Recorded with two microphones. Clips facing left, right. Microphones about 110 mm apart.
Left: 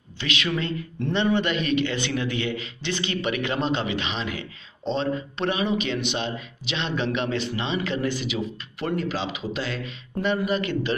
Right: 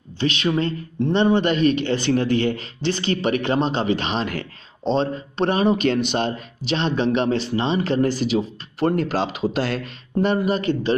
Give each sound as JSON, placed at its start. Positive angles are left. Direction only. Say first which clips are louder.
{"t": 0.2, "sound": "speech", "louder": "right 6 dB", "side_deg": -30}
{"t": 4.8, "sound": "speech", "louder": "right 4 dB", "side_deg": -30}
{"t": 8.9, "sound": "speech", "louder": "right 5 dB", "side_deg": -45}